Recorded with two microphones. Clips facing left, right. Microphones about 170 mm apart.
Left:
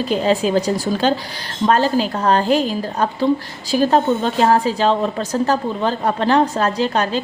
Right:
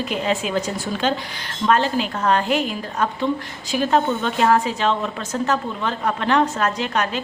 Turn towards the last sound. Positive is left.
turn(degrees=30)  # may be behind; listen again after turning